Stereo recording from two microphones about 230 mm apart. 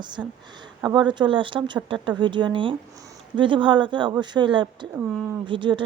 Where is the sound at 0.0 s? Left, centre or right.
Centre.